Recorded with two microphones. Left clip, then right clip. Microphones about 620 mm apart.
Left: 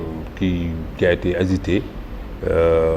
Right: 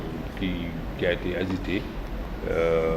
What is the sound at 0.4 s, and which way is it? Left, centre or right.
Speech, left.